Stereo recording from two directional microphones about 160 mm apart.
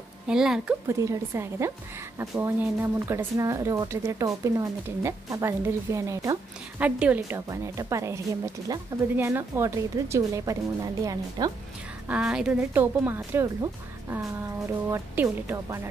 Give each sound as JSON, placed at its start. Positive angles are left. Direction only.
{"t": 0.3, "sound": "speech", "side_deg": -5}
{"t": 0.8, "sound": "speech", "side_deg": -20}
{"t": 12.1, "sound": "speech", "side_deg": -5}